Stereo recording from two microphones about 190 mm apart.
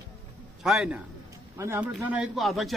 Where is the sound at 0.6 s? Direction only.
Centre (ahead or behind).